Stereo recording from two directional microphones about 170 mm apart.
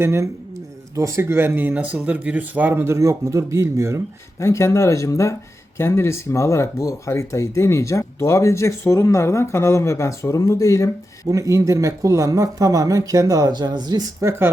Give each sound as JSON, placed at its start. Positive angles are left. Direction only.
{"t": 0.0, "sound": "speech", "side_deg": -15}
{"t": 4.4, "sound": "speech", "side_deg": 15}
{"t": 11.3, "sound": "speech", "side_deg": -20}